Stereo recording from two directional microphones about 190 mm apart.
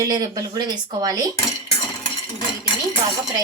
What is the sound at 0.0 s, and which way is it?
A woman's voice, 20° right (ahead or behind).